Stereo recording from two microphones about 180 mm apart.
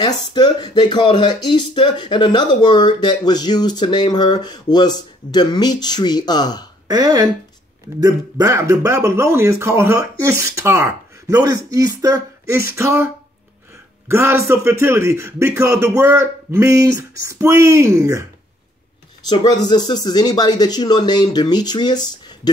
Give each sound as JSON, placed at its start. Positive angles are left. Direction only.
{"t": 0.0, "sound": "speech", "side_deg": 25}
{"t": 6.9, "sound": "speech", "side_deg": -20}
{"t": 19.2, "sound": "speech", "side_deg": 25}